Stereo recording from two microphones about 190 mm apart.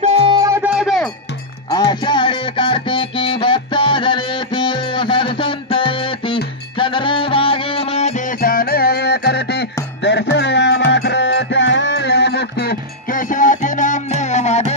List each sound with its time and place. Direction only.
0.0 s music: 30° right (ahead or behind); by 1.0 s 5° right (ahead or behind)
1.7 s music: 20° left (ahead or behind)